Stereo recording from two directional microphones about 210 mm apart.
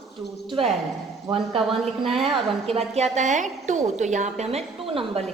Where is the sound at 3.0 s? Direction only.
35° right (ahead or behind).